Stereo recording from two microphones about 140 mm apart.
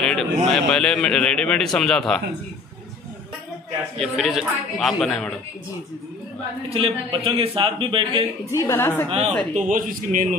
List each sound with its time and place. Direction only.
0.0 s a sound: centre (ahead or behind)
0.5 s a man's voice: 5° left (ahead or behind)
4.0 s a man's voice: centre (ahead or behind)
6.7 s a man's voice: 40° right (ahead or behind)
8.5 s a woman's voice: 20° left (ahead or behind)
9.5 s speech: 65° right (ahead or behind)